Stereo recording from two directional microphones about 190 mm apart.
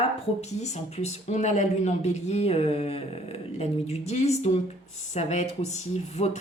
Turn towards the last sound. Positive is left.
turn(degrees=35)  # may be behind; listen again after turning